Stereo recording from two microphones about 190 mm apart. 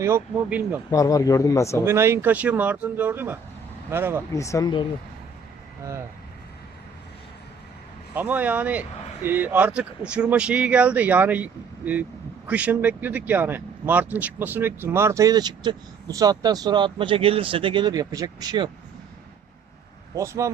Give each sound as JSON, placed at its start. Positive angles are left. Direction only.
{"t": 0.0, "sound": "speech", "side_deg": -10}
{"t": 0.9, "sound": "speech", "side_deg": 20}
{"t": 1.8, "sound": "speech", "side_deg": -15}
{"t": 4.3, "sound": "speech", "side_deg": 15}
{"t": 8.1, "sound": "speech", "side_deg": -10}
{"t": 20.1, "sound": "speech", "side_deg": -15}